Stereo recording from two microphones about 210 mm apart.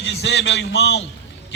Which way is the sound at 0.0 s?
60° left (ahead or behind).